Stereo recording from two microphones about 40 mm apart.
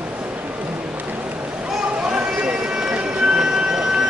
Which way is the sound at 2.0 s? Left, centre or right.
Centre.